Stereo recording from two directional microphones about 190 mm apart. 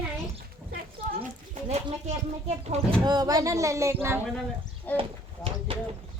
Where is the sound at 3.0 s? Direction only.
20° right (ahead or behind).